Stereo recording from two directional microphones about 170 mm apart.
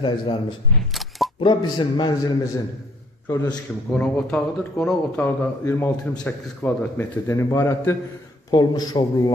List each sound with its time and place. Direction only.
0.9 s single-lens reflex camera: centre (ahead or behind)
1.4 s a man's voice: 30° left (ahead or behind)
3.9 s a man's voice: 5° left (ahead or behind); by 9.3 s 25° left (ahead or behind)